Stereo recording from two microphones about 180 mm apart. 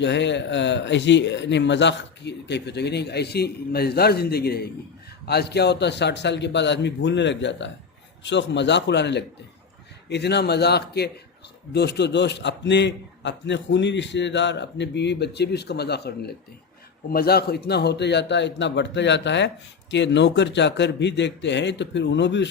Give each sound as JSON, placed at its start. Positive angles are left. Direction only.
{"t": 0.0, "sound": "speech", "side_deg": 80}